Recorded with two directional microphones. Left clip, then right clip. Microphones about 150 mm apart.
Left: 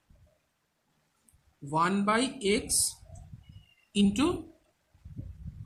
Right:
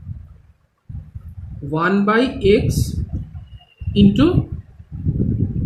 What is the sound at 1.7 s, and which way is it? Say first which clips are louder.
Speech: right 10 dB; 50° left (ahead or behind).